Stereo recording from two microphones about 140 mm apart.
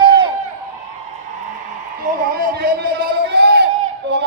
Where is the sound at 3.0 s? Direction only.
90° right.